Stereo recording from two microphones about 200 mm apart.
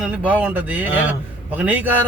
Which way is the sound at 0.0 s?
5° right (ahead or behind).